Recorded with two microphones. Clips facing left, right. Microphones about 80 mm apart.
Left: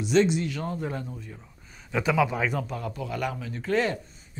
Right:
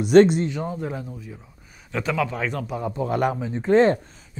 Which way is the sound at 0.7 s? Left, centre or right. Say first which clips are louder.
Right 2 dB; centre.